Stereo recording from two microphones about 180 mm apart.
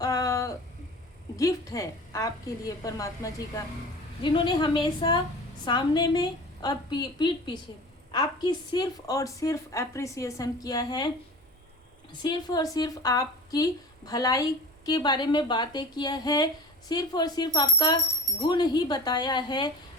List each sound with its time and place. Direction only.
0.0 s a sound: 20° left (ahead or behind)
1.4 s a woman's voice: 20° left (ahead or behind)
12.2 s a woman's voice: 20° left (ahead or behind)